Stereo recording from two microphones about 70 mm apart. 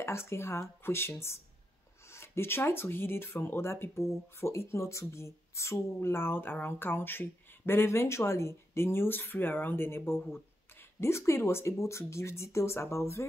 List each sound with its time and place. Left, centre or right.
0.0 s speech: left